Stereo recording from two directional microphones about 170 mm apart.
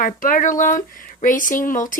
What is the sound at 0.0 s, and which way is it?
Speech, 55° left (ahead or behind).